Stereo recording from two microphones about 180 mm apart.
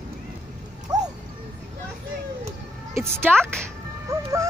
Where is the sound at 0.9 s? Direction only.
20° right (ahead or behind).